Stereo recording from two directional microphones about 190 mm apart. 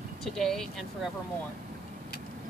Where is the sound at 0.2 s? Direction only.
Centre (ahead or behind).